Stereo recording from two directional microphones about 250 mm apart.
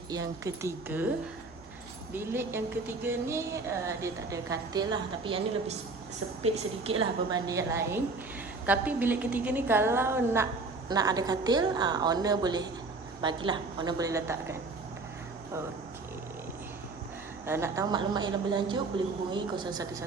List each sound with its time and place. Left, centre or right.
0.1 s a woman's voice: centre
2.1 s a woman's voice: centre
6.9 s a woman's voice: right
17.4 s a woman's voice: centre